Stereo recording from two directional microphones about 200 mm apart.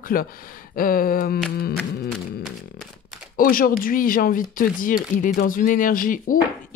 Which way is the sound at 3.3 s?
45° left (ahead or behind).